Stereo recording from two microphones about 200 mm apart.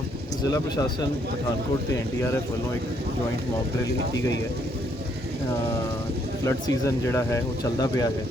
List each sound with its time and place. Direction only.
0.4 s speech: 15° left (ahead or behind)
6.4 s speech: 15° left (ahead or behind)